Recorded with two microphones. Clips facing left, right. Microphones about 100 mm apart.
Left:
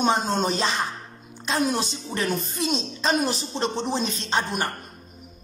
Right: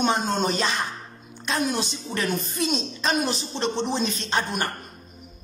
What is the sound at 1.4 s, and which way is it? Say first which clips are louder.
A woman's voice: left 1 dB; 25° left (ahead or behind).